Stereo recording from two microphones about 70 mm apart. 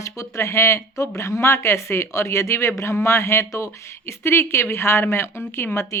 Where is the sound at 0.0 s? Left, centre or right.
Left.